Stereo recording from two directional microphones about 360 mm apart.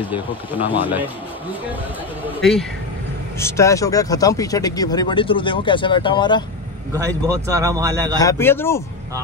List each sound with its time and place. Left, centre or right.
0.6 s speech: centre
3.3 s speech: centre
6.9 s a man's voice: centre
8.2 s speech: centre